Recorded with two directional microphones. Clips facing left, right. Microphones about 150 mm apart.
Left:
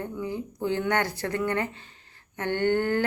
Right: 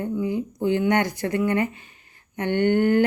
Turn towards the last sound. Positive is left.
turn(degrees=-15)  # may be behind; listen again after turning